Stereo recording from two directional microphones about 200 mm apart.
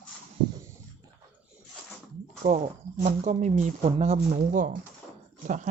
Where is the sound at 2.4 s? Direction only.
45° right (ahead or behind).